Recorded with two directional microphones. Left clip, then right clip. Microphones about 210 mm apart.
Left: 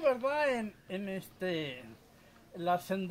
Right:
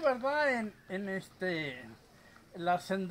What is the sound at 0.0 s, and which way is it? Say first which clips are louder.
A man's voice: even; 15° left (ahead or behind).